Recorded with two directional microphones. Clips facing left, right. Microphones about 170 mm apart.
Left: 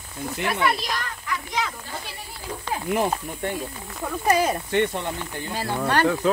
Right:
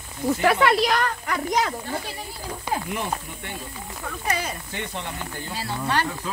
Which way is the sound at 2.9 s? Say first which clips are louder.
Left 5 dB; 45° left (ahead or behind).